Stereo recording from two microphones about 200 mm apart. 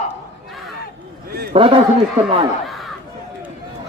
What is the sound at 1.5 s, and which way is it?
Speech, 25° right (ahead or behind).